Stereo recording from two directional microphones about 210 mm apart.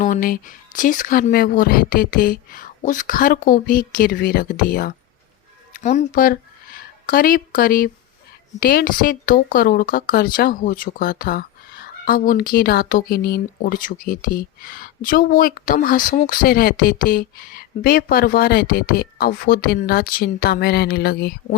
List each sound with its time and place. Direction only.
0.0 s speech: 40° left (ahead or behind)